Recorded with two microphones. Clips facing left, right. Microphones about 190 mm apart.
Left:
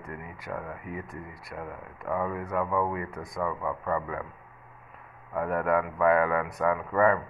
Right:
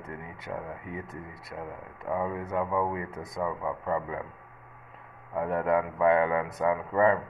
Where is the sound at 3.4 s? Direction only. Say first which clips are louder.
Even; 25° right (ahead or behind).